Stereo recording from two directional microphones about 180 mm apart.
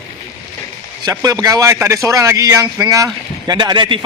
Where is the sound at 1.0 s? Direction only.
20° right (ahead or behind).